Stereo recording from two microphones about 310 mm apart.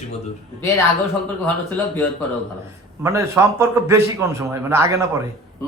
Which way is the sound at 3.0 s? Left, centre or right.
Centre.